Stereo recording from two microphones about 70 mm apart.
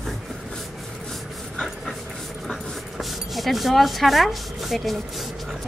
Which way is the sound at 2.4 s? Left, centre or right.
Centre.